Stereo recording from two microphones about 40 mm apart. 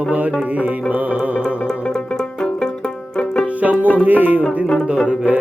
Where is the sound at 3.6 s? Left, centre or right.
Right.